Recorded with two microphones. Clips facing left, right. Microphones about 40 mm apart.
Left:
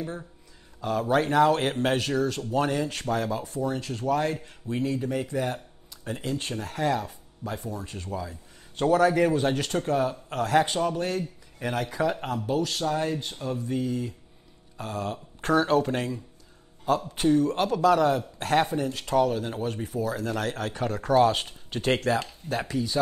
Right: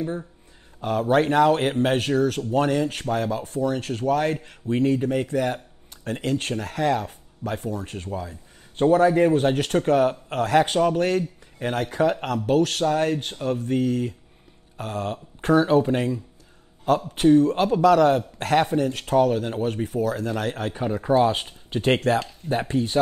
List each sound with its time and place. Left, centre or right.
0.7 s speech: right
2.0 s speech: right
9.3 s speech: right
12.4 s speech: right
14.8 s speech: right
15.6 s speech: right
17.1 s speech: right
20.8 s speech: right
22.5 s speech: right